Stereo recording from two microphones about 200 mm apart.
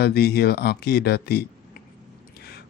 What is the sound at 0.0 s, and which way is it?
Speech, 50° left (ahead or behind).